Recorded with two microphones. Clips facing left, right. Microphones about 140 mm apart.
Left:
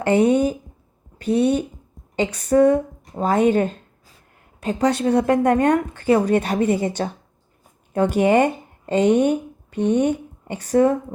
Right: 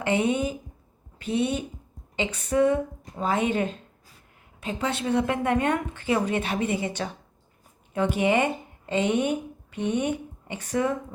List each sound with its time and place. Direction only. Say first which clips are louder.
0.0 s a woman's voice: left 8 dB; 40° left (ahead or behind)